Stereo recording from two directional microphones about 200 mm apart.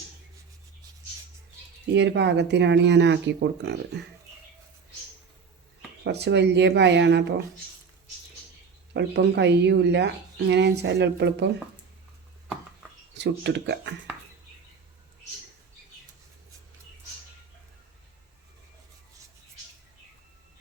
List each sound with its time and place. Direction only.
1.9 s speech: 60° right (ahead or behind)
6.1 s speech: 60° right (ahead or behind)
8.9 s speech: 60° right (ahead or behind)
13.1 s speech: 60° right (ahead or behind)